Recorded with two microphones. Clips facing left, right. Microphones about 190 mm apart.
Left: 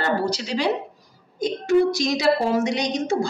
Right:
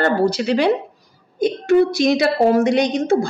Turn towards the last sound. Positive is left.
turn(degrees=-55)  # may be behind; listen again after turning